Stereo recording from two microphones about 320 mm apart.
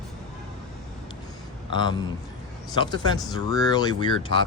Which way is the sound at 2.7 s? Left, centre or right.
Centre.